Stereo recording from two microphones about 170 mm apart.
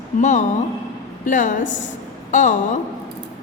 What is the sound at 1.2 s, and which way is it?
A woman's voice, 50° left (ahead or behind).